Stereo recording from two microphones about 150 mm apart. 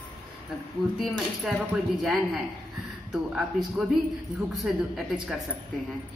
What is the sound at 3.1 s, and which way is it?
A woman's voice, 5° right (ahead or behind).